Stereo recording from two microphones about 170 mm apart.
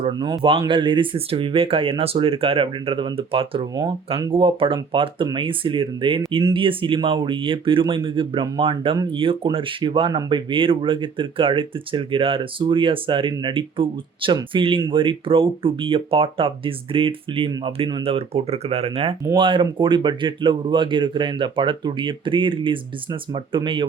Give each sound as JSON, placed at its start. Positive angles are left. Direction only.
{"t": 0.0, "sound": "speech", "side_deg": -25}